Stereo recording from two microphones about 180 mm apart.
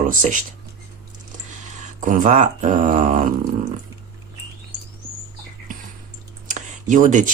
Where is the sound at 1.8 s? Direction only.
45° right (ahead or behind).